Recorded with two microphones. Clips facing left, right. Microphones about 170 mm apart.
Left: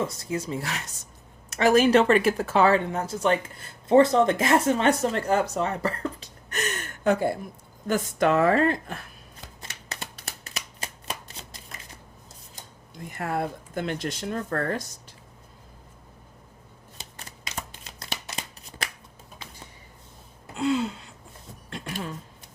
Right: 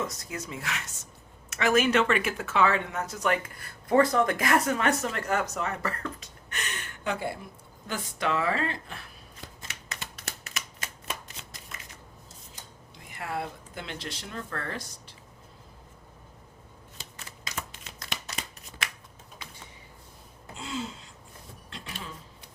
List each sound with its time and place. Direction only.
0.0 s speech: 30° left (ahead or behind); by 9.0 s 45° left (ahead or behind)
9.6 s shuffling cards: 35° left (ahead or behind)
13.1 s speech: 45° left (ahead or behind)
17.8 s shuffling cards: 35° left (ahead or behind)
20.6 s a sound: 65° left (ahead or behind)
21.7 s a sound: 50° left (ahead or behind)